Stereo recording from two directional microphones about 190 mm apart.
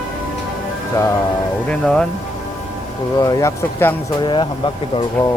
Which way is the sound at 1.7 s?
5° left (ahead or behind).